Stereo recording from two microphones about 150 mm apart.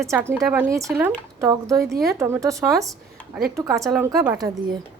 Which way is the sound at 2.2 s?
15° right (ahead or behind).